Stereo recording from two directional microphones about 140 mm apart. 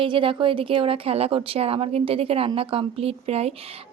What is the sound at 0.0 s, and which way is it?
A woman's voice, 40° right (ahead or behind).